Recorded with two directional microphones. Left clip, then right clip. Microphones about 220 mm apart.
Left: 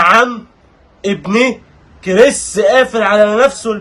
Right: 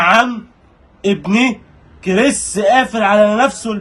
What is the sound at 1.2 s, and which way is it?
Speech, 15° left (ahead or behind).